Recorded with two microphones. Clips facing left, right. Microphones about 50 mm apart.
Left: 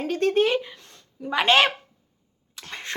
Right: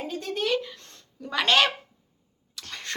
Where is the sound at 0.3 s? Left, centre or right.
Left.